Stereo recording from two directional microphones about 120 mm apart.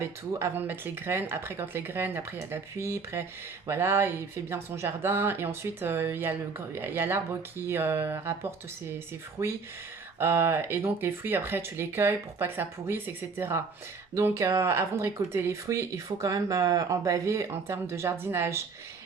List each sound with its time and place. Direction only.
0.0 s speech: 20° right (ahead or behind)